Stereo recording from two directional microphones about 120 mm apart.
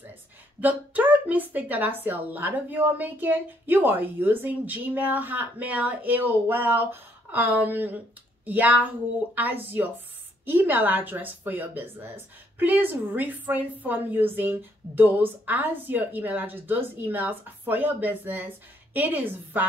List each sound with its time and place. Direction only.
0.6 s speech: 15° right (ahead or behind)